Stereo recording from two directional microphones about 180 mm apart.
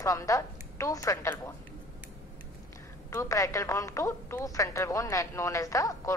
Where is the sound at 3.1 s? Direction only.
15° left (ahead or behind).